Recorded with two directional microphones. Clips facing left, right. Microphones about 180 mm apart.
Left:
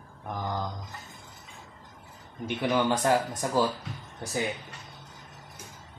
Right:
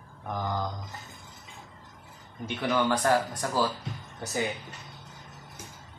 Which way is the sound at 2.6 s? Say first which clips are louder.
Even; 15° left (ahead or behind).